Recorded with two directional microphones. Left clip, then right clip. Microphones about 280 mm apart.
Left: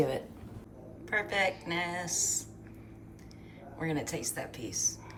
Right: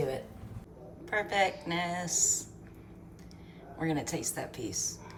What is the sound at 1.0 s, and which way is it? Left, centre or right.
A woman's voice, centre.